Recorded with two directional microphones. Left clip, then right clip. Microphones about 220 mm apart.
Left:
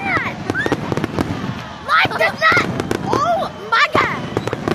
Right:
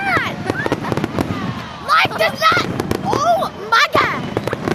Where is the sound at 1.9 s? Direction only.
5° right (ahead or behind).